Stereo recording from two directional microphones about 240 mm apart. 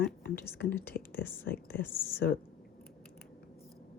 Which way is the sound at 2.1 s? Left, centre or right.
Left.